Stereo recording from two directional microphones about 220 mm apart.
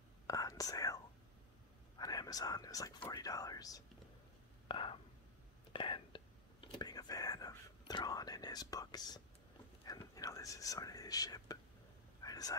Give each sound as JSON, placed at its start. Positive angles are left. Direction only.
{"t": 0.3, "sound": "whispering", "side_deg": 15}
{"t": 2.0, "sound": "speech", "side_deg": 15}
{"t": 5.7, "sound": "whispering", "side_deg": 25}
{"t": 9.8, "sound": "speech", "side_deg": 15}
{"t": 12.2, "sound": "a sound", "side_deg": 15}